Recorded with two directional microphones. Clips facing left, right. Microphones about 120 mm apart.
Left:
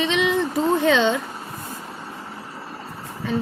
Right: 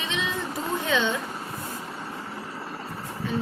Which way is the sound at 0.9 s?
90° left.